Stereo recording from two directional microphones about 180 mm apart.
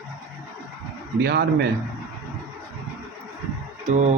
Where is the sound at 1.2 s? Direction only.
65° right (ahead or behind).